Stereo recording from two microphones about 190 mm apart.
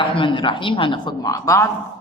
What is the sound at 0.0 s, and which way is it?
A woman's voice, 25° left (ahead or behind).